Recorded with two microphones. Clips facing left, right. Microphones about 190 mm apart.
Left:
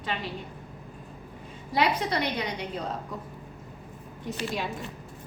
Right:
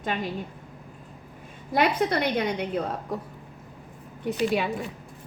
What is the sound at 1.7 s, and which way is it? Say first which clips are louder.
A woman's voice: right 3 dB; 55° right (ahead or behind).